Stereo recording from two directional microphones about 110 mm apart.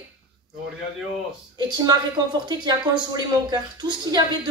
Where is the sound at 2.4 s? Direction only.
45° right (ahead or behind).